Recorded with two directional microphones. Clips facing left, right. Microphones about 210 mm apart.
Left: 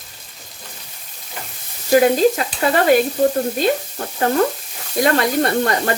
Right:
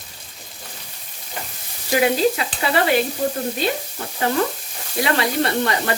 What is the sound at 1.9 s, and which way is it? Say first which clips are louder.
Speech: left 5 dB; 45° left (ahead or behind).